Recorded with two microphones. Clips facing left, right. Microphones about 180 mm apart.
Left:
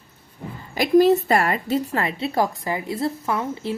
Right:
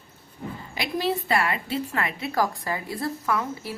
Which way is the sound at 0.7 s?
45° left (ahead or behind).